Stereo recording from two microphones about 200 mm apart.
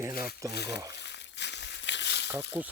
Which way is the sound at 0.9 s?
60° left (ahead or behind).